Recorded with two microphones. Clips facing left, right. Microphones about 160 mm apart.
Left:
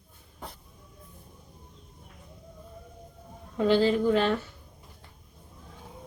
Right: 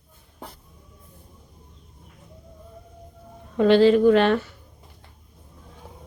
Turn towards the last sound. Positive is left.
turn(degrees=-75)  # may be behind; listen again after turning